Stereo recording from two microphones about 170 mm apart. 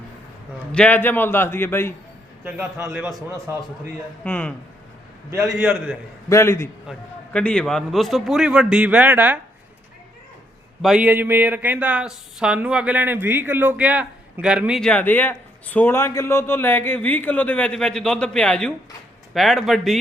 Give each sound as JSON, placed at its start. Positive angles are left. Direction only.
{"t": 0.7, "sound": "a man's voice", "side_deg": 10}
{"t": 2.4, "sound": "speech", "side_deg": -15}
{"t": 4.2, "sound": "a man's voice", "side_deg": 5}
{"t": 6.2, "sound": "a man's voice", "side_deg": 15}
{"t": 7.3, "sound": "a man's voice", "side_deg": 5}
{"t": 10.8, "sound": "speech", "side_deg": -5}
{"t": 14.8, "sound": "a man's voice", "side_deg": 5}